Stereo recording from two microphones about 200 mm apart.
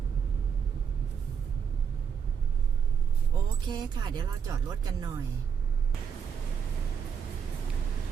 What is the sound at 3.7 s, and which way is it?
Speech, 25° right (ahead or behind).